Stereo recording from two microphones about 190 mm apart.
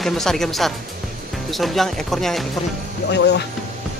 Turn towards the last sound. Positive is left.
turn(degrees=65)  # may be behind; listen again after turning